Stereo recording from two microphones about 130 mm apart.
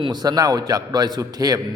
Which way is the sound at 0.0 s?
30° right (ahead or behind).